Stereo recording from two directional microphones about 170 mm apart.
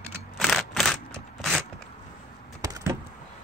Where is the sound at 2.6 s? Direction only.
20° right (ahead or behind).